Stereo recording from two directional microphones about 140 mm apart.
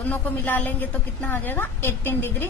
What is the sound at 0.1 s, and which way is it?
A woman's voice, 15° left (ahead or behind).